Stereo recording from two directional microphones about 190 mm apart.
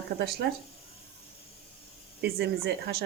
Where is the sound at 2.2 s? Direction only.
60° right (ahead or behind).